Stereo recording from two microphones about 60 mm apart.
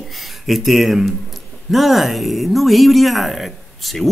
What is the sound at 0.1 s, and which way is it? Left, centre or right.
Speech, centre.